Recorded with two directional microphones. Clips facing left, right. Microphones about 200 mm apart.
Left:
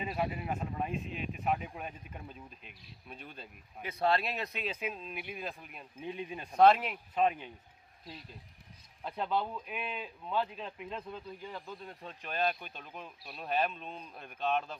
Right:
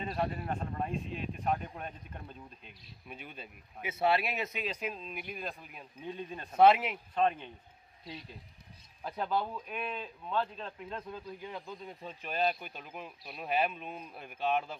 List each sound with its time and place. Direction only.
0.0 s speech: 5° left (ahead or behind)
3.1 s speech: 5° right (ahead or behind)
6.1 s speech: 15° left (ahead or behind)
6.5 s speech: 5° right (ahead or behind)
7.2 s speech: 10° left (ahead or behind)
9.0 s speech: centre (ahead or behind)
11.6 s speech: 15° right (ahead or behind)
12.0 s speech: 5° right (ahead or behind)